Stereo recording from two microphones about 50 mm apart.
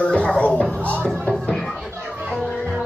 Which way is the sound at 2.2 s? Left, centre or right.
Centre.